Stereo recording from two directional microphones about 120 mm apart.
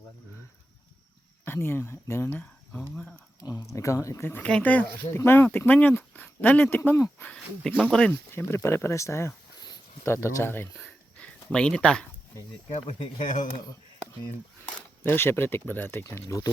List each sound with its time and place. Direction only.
1.5 s speech: 20° left (ahead or behind)
3.4 s speech: 30° left (ahead or behind); by 8.1 s 5° left (ahead or behind)
8.1 s speech: 20° left (ahead or behind)
10.8 s a sound: 10° left (ahead or behind)
15.0 s speech: 20° left (ahead or behind)